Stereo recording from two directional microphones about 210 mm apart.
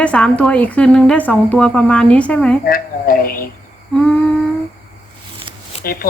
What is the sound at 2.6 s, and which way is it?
Speech, 45° left (ahead or behind).